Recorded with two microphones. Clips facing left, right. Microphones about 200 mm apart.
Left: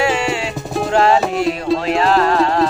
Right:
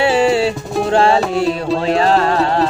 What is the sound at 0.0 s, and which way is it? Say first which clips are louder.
Music: right 5 dB; 35° right (ahead or behind).